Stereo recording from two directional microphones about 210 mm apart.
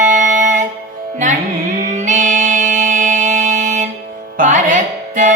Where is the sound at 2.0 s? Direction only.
35° right (ahead or behind).